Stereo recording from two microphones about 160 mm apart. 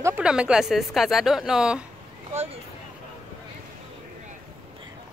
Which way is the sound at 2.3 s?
40° right (ahead or behind).